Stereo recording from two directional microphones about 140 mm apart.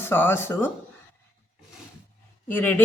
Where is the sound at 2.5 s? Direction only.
15° left (ahead or behind).